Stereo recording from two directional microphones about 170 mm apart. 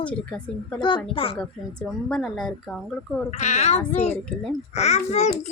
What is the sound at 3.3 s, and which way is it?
Speech, 40° left (ahead or behind).